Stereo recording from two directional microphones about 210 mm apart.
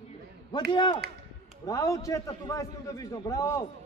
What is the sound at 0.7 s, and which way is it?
A man's voice, 20° left (ahead or behind).